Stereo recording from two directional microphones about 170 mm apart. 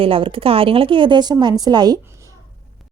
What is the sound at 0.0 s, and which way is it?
A woman's voice, 30° right (ahead or behind).